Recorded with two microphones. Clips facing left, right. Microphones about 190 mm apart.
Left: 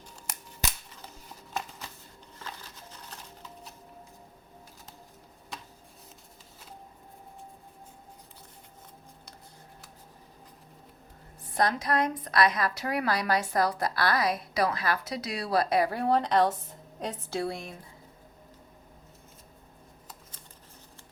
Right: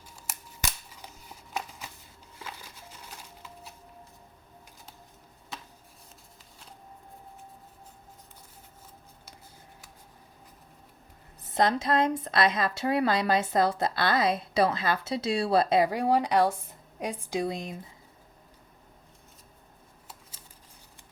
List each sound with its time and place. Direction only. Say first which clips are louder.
0.3 s scissors: right 1 dB; 5° right (ahead or behind)
2.4 s a sound: even; 10° right (ahead or behind)
11.5 s a woman's voice: right 2 dB; 25° right (ahead or behind)